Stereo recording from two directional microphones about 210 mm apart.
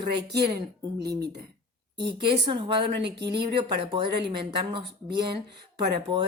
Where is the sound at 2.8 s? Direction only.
55° right (ahead or behind).